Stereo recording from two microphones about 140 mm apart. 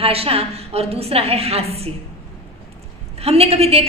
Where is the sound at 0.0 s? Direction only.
45° right (ahead or behind).